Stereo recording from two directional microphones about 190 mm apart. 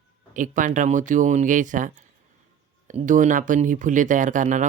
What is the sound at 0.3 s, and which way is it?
Speech, 45° right (ahead or behind).